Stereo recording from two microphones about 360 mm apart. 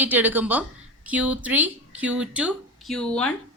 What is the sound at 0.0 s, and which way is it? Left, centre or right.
A woman's voice, centre.